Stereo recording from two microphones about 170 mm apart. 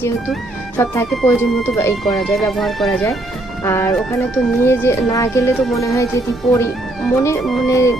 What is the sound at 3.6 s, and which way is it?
Speech, 15° left (ahead or behind).